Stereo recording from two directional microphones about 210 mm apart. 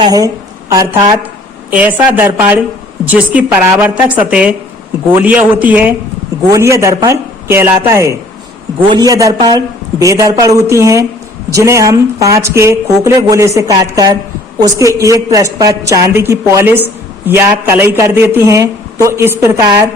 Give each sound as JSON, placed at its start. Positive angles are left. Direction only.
{"t": 0.0, "sound": "a woman's voice", "side_deg": -20}